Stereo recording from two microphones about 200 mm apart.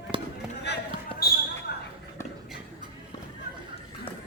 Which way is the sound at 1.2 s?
50° left (ahead or behind).